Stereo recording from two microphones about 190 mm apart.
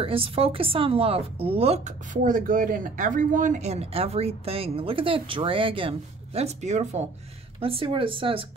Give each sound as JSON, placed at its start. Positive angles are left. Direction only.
{"t": 0.0, "sound": "a woman's voice", "side_deg": -30}